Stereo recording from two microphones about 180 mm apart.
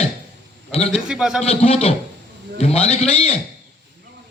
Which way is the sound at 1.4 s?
35° left (ahead or behind).